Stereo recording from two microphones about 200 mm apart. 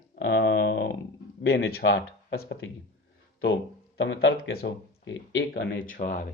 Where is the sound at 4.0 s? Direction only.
65° left (ahead or behind).